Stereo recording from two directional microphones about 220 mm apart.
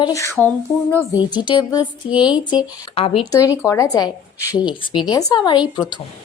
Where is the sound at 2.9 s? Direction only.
25° left (ahead or behind).